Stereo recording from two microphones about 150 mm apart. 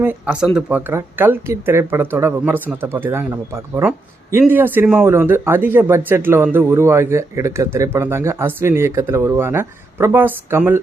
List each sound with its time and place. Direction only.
0.0 s speech: 10° right (ahead or behind)